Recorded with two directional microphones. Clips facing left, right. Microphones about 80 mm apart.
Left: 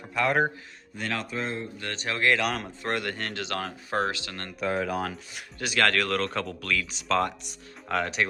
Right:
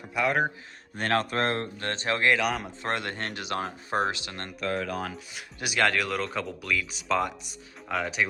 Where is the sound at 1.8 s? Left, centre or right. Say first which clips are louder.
Right 2 dB; right.